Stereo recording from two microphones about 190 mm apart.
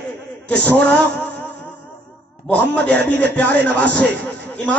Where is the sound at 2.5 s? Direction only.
5° left (ahead or behind).